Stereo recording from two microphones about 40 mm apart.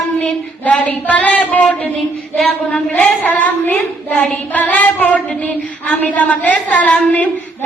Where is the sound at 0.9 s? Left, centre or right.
Left.